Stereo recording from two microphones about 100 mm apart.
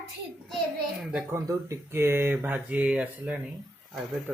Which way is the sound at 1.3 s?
30° right (ahead or behind).